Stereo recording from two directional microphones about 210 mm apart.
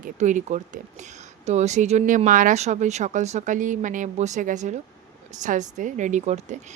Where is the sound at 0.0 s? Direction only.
35° right (ahead or behind).